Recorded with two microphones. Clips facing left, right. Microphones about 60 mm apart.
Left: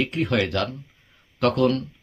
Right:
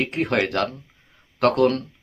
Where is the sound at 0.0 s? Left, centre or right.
Right.